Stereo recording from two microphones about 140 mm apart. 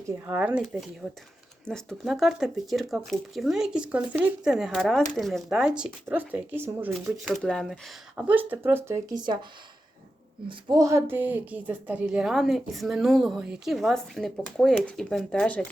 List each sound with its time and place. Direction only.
0.3 s speech: 10° right (ahead or behind)
1.6 s speech: 5° left (ahead or behind)
7.4 s speech: centre (ahead or behind)
8.1 s speech: 10° right (ahead or behind); by 9.5 s 30° right (ahead or behind)
10.5 s speech: 25° right (ahead or behind); by 15.6 s 5° left (ahead or behind)